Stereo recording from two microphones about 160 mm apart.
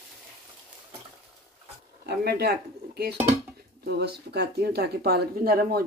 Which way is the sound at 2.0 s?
85° right.